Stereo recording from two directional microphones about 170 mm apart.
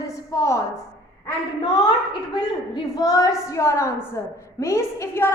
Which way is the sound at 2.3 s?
25° left (ahead or behind).